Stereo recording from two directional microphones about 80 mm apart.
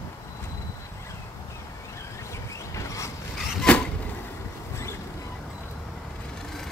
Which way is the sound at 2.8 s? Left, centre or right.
Left.